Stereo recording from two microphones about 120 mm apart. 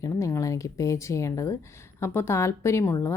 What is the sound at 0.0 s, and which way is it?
A woman's voice, 25° left (ahead or behind).